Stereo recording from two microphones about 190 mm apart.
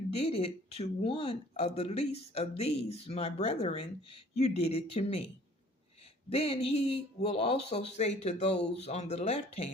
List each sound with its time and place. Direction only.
0.1 s speech: 35° left (ahead or behind)
6.3 s speech: 30° left (ahead or behind)